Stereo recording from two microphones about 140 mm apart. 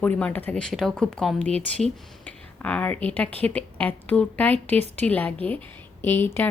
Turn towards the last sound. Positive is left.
turn(degrees=15)  # may be behind; listen again after turning